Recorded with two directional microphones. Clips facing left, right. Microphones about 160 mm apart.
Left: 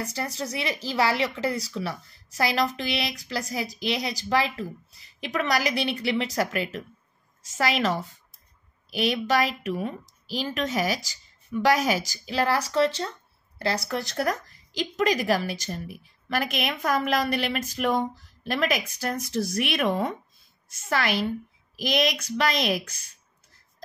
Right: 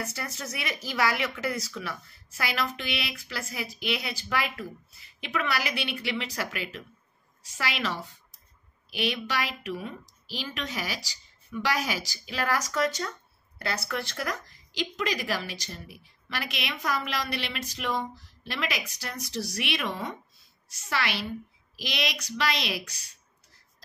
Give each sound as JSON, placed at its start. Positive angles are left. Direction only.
{"t": 0.0, "sound": "a woman's voice", "side_deg": 30}